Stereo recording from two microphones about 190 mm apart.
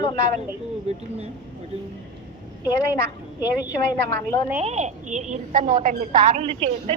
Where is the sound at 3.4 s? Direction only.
10° right (ahead or behind).